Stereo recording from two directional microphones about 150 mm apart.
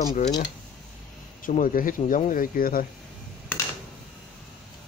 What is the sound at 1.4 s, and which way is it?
Speech, 65° left (ahead or behind).